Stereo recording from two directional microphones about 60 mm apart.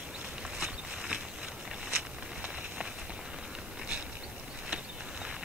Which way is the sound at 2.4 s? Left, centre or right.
Centre.